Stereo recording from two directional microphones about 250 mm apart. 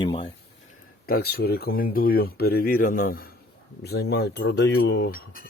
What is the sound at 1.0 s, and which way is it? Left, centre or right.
Speech, left.